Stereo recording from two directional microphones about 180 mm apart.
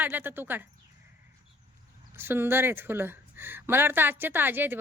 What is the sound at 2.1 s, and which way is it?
Speech, 10° right (ahead or behind).